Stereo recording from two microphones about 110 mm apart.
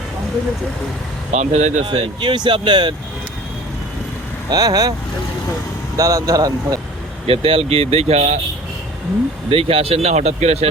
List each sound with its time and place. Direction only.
1.3 s speech: 90° right
1.9 s speech: 45° right (ahead or behind)
4.4 s speech: 35° right (ahead or behind)
6.0 s speech: 30° right (ahead or behind)
7.3 s speech: 60° right (ahead or behind)
9.5 s speech: 60° right (ahead or behind)